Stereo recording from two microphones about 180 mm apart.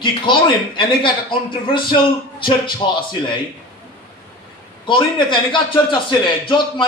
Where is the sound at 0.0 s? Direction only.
25° left (ahead or behind).